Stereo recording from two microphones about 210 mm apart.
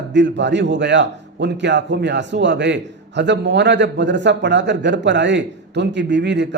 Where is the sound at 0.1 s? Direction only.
55° right (ahead or behind).